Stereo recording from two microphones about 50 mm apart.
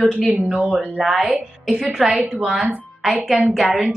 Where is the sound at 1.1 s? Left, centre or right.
Centre.